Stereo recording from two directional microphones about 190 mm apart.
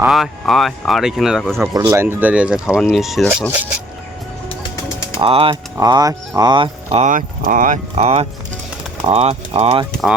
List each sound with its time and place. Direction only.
0.0 s speech: centre (ahead or behind)
1.7 s speech: 15° right (ahead or behind)
5.2 s speech: 30° right (ahead or behind)
7.1 s speech: 45° right (ahead or behind)